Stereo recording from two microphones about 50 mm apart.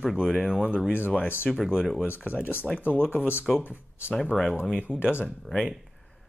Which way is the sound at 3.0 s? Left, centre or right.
Left.